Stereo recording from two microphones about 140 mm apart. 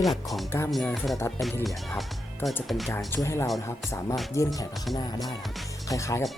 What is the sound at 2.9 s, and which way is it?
Speech, 15° left (ahead or behind).